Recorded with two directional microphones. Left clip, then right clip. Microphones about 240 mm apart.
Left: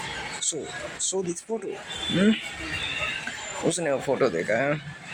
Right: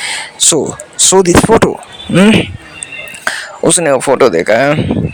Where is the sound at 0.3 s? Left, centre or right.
Right.